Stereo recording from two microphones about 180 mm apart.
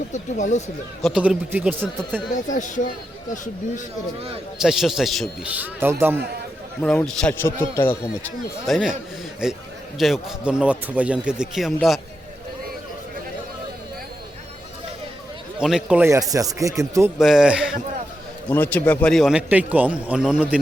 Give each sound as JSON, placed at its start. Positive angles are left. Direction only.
{"t": 0.1, "sound": "speech", "side_deg": 40}
{"t": 1.0, "sound": "speech", "side_deg": -5}
{"t": 2.3, "sound": "speech", "side_deg": 45}
{"t": 4.5, "sound": "a man's voice", "side_deg": 0}
{"t": 6.8, "sound": "a man's voice", "side_deg": 5}
{"t": 15.5, "sound": "speech", "side_deg": -5}
{"t": 17.2, "sound": "a man's voice", "side_deg": 0}
{"t": 18.4, "sound": "a man's voice", "side_deg": 10}